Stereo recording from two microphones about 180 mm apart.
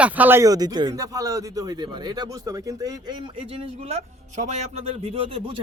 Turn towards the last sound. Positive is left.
turn(degrees=-30)  # may be behind; listen again after turning